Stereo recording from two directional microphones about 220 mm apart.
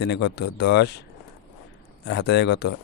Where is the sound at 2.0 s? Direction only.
50° left (ahead or behind).